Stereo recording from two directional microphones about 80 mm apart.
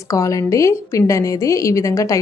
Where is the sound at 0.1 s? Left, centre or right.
Left.